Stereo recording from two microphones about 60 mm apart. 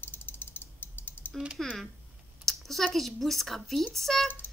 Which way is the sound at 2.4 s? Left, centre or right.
Centre.